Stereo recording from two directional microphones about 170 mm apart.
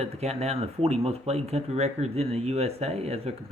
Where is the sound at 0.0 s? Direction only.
40° right (ahead or behind).